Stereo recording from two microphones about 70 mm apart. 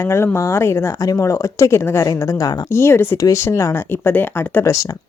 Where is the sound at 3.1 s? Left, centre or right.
Left.